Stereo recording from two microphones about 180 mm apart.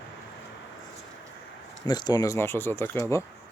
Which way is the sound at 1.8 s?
25° left (ahead or behind).